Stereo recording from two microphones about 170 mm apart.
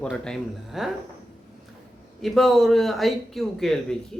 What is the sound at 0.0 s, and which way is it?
Speech, centre (ahead or behind).